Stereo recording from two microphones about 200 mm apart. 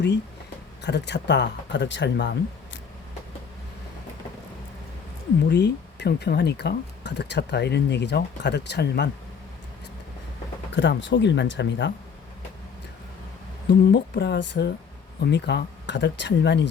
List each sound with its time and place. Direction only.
0.8 s speech: 60° left (ahead or behind)
5.5 s speech: 55° left (ahead or behind)
10.7 s speech: 65° left (ahead or behind)
13.7 s speech: 55° left (ahead or behind)